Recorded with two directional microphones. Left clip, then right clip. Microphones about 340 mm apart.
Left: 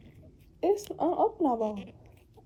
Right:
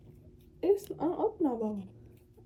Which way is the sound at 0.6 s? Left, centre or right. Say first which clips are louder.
Left 2 dB; centre.